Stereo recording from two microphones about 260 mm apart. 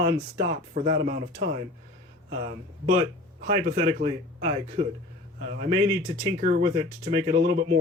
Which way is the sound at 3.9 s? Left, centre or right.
Right.